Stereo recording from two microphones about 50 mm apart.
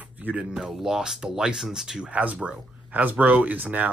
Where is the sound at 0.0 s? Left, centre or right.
Right.